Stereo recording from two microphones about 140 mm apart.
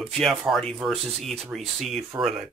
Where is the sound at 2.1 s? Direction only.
25° right (ahead or behind).